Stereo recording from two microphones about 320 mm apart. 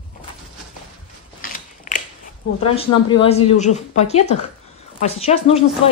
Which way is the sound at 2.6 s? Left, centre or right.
Centre.